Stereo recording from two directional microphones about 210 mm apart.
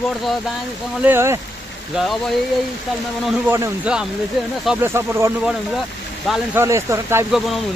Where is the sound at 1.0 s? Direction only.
10° right (ahead or behind).